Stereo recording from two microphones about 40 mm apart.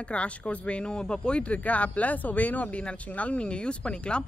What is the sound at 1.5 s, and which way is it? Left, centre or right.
Speech, left.